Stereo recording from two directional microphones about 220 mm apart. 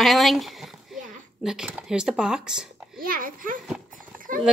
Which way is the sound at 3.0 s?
40° right (ahead or behind).